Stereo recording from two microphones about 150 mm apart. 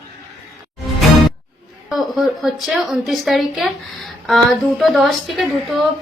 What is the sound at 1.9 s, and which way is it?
A woman's voice, centre (ahead or behind).